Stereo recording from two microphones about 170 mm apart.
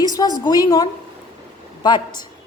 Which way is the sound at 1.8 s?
25° left (ahead or behind).